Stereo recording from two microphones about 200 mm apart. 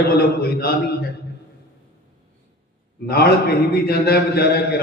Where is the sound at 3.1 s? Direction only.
50° left (ahead or behind).